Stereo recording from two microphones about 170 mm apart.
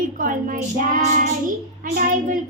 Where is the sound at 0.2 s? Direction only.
55° right (ahead or behind).